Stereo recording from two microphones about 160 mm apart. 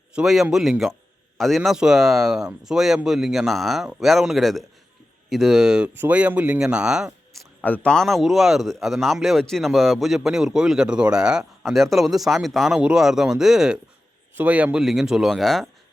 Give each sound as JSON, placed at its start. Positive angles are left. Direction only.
{"t": 0.2, "sound": "speech", "side_deg": -5}
{"t": 7.6, "sound": "speech", "side_deg": 10}